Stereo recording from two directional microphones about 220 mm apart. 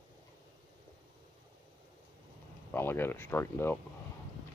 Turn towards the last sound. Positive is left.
turn(degrees=10)  # may be behind; listen again after turning